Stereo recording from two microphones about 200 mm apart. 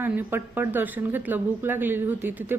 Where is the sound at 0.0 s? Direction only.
10° right (ahead or behind).